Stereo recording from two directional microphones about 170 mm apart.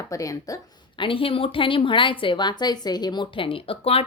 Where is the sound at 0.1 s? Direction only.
20° left (ahead or behind).